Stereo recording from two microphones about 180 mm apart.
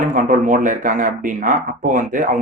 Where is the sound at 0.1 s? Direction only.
45° right (ahead or behind).